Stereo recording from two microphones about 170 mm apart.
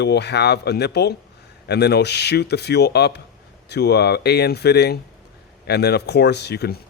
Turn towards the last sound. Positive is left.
turn(degrees=75)  # may be behind; listen again after turning